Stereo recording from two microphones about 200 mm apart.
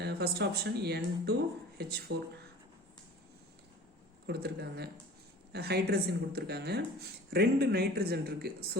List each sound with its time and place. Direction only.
0.0 s speech: 55° right (ahead or behind)
4.3 s speech: 55° right (ahead or behind)